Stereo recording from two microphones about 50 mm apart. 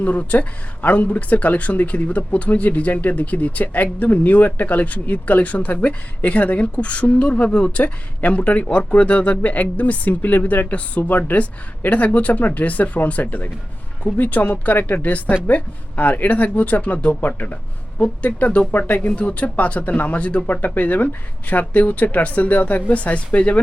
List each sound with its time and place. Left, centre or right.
0.0 s speech: left